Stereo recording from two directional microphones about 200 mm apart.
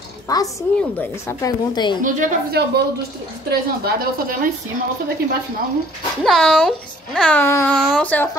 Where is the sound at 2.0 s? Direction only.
45° right (ahead or behind).